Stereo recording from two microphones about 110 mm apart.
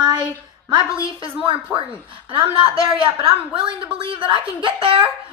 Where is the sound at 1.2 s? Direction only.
55° right (ahead or behind).